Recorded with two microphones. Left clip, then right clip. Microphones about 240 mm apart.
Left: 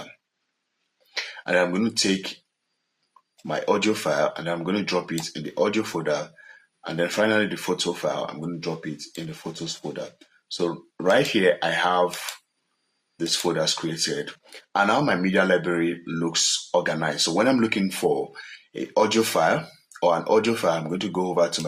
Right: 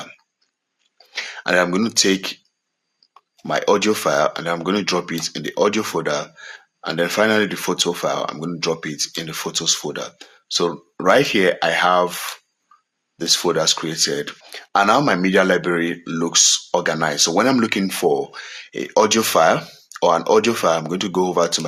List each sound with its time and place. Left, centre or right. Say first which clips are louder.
1.5 s speech: right 5 dB; right
3.4 s speech: right 6 dB; right
13.1 s speech: right 6 dB; right